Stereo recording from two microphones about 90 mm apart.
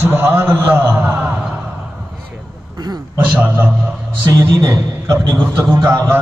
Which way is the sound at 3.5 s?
20° right (ahead or behind).